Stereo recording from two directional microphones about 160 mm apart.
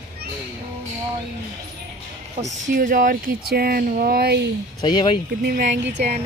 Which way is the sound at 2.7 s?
55° right (ahead or behind).